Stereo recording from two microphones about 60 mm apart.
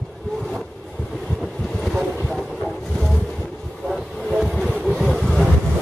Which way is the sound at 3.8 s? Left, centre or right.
Centre.